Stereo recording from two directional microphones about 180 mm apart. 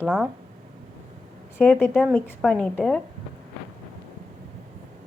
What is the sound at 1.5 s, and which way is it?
Speech, 10° left (ahead or behind).